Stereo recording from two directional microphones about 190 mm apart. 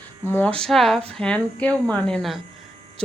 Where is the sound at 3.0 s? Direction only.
5° left (ahead or behind).